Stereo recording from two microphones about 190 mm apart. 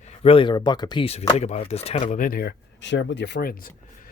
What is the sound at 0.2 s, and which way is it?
Speech, 30° left (ahead or behind).